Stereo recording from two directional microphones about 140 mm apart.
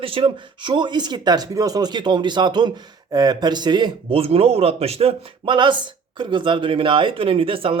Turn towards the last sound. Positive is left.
turn(degrees=-40)  # may be behind; listen again after turning